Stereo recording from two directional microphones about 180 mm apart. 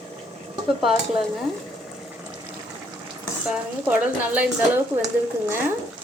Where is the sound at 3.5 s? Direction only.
10° right (ahead or behind).